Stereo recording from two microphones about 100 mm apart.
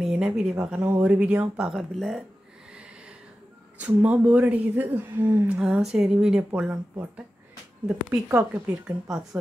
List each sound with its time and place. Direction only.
0.0 s speech: 5° right (ahead or behind)
3.8 s speech: 15° right (ahead or behind)
5.6 s speech: 5° right (ahead or behind)
8.3 s speech: 20° right (ahead or behind)